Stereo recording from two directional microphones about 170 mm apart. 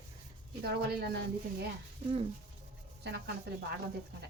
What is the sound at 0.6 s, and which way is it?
Speech, 70° right (ahead or behind).